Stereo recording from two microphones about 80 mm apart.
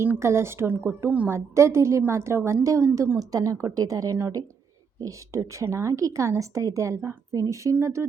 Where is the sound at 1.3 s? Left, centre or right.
Right.